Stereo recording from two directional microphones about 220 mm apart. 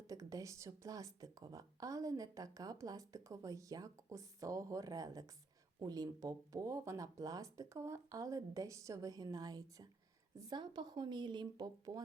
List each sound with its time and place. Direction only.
0.1 s speech: 15° right (ahead or behind)